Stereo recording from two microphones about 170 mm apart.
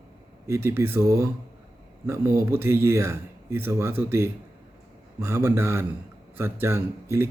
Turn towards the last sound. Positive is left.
turn(degrees=-15)  # may be behind; listen again after turning